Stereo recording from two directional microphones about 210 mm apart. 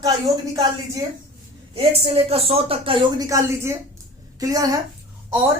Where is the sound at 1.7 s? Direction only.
30° right (ahead or behind).